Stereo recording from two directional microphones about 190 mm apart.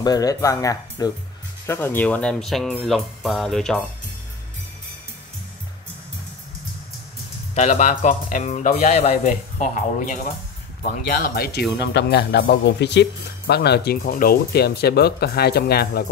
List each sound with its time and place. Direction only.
0.0 s speech: 20° left (ahead or behind); by 3.8 s centre (ahead or behind)
7.5 s a man's voice: 40° left (ahead or behind); by 16.1 s 55° left (ahead or behind)